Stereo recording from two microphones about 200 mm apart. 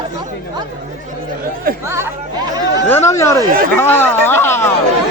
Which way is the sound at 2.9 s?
15° left (ahead or behind).